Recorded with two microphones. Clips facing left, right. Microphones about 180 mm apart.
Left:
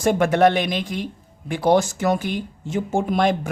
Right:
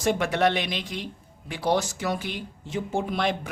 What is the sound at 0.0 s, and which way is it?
Speech, 50° left (ahead or behind).